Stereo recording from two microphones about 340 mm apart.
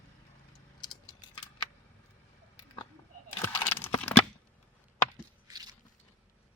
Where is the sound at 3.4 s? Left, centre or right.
Centre.